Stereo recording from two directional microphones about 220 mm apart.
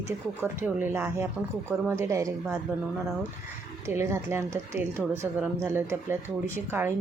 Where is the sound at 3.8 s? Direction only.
10° right (ahead or behind).